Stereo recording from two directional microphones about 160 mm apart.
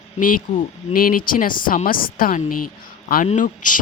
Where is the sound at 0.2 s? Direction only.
60° left (ahead or behind).